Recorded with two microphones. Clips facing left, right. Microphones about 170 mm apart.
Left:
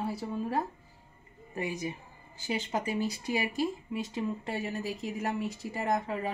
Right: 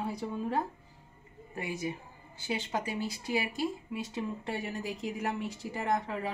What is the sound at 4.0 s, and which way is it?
Speech, 15° left (ahead or behind).